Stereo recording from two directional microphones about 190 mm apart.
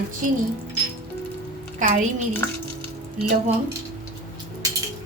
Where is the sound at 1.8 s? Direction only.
40° right (ahead or behind).